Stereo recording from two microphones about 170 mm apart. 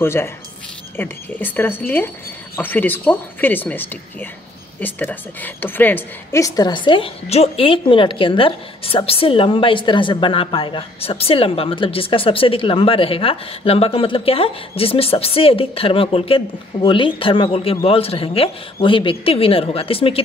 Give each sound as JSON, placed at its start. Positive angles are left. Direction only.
{"t": 0.0, "sound": "a woman's voice", "side_deg": 15}